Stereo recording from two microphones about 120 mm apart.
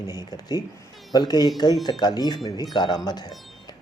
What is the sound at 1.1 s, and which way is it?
Speech, 35° left (ahead or behind).